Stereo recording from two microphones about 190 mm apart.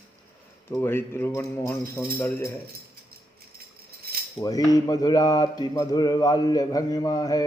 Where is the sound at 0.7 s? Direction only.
10° left (ahead or behind).